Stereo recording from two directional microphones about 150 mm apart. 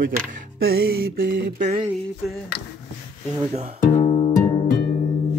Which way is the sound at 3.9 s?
45° left (ahead or behind).